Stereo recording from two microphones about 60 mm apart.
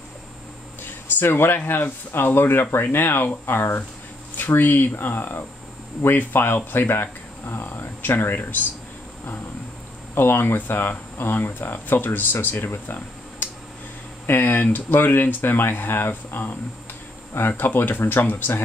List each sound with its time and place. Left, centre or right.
0.8 s speech: left
10.1 s speech: left